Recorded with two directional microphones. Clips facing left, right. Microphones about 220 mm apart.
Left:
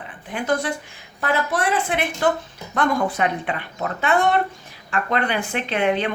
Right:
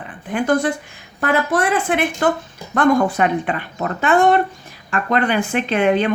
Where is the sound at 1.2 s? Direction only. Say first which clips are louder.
Right 4 dB; 50° right (ahead or behind).